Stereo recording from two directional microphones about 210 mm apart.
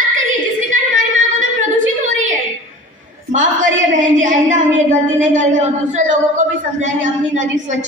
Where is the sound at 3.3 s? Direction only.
35° right (ahead or behind).